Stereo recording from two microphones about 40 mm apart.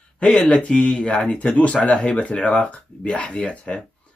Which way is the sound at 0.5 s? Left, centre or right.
Left.